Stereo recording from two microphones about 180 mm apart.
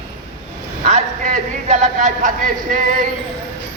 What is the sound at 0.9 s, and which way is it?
Speech, 40° right (ahead or behind).